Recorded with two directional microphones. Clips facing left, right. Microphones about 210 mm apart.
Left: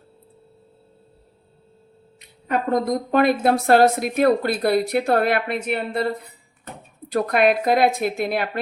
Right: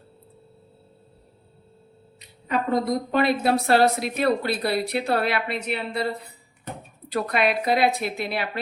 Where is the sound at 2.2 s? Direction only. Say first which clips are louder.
Left 2 dB; 50° left (ahead or behind).